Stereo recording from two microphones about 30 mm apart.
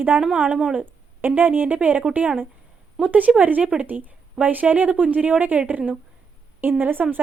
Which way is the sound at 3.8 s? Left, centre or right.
Right.